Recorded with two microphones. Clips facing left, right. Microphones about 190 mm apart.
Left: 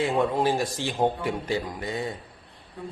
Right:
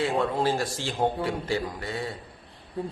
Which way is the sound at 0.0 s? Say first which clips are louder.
Left 2 dB; 15° left (ahead or behind).